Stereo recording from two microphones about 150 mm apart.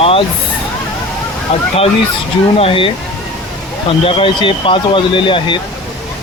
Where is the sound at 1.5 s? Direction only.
40° left (ahead or behind).